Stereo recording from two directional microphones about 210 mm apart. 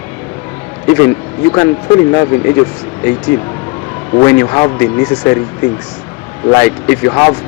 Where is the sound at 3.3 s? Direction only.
10° left (ahead or behind).